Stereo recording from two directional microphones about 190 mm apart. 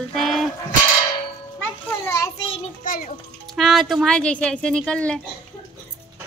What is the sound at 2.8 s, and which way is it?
Speech, 45° left (ahead or behind).